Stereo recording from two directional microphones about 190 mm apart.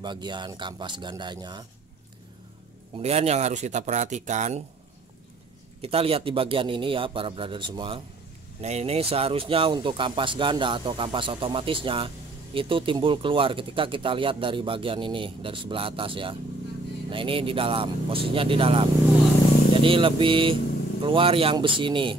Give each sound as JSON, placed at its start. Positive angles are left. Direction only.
{"t": 0.0, "sound": "speech", "side_deg": -25}
{"t": 3.0, "sound": "speech", "side_deg": -35}
{"t": 5.8, "sound": "speech", "side_deg": -30}